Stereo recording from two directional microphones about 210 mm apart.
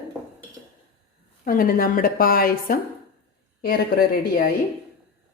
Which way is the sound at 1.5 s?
45° left (ahead or behind).